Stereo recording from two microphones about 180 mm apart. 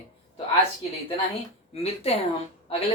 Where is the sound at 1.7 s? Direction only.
35° left (ahead or behind).